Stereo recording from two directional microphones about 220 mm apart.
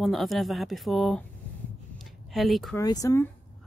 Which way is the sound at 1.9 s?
Centre (ahead or behind).